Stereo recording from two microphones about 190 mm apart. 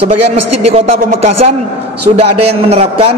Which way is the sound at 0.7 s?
30° right (ahead or behind).